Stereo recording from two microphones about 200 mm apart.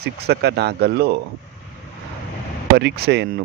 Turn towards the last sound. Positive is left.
turn(degrees=-55)  # may be behind; listen again after turning